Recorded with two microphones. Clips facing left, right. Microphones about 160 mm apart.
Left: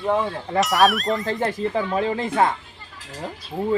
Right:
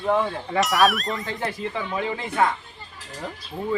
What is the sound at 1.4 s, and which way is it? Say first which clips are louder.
Speech: left 5 dB; 40° left (ahead or behind).